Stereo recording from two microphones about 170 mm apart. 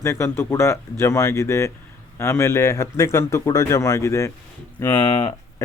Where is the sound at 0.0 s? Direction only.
15° left (ahead or behind).